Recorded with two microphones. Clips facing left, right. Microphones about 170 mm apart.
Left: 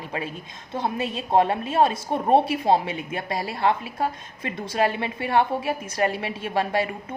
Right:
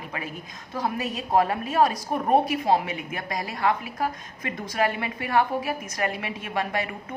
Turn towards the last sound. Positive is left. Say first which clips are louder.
# left 4 dB
turn(degrees=30)  # may be behind; listen again after turning